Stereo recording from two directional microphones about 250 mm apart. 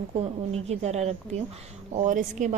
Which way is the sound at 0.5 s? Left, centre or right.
Right.